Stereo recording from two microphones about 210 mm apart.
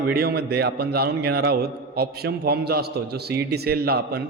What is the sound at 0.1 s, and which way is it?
A man's voice, 45° right (ahead or behind).